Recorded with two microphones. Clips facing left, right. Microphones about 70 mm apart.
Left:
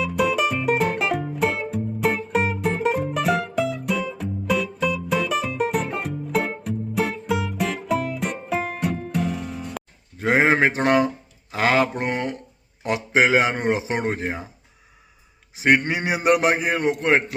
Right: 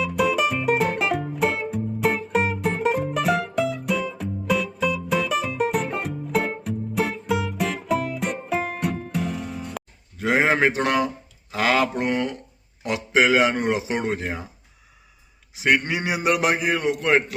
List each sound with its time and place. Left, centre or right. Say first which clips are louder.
0.0 s music: even; centre
10.2 s a sound: left 2 dB; left
11.5 s speech: left 1 dB; left
15.5 s a man's voice: left 2 dB; left